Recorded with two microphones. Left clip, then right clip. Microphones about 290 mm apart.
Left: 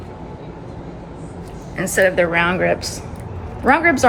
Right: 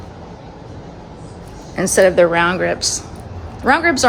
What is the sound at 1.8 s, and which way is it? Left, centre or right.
Speech, right.